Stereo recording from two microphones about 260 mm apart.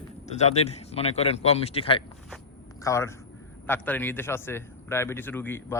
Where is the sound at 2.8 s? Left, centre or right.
Centre.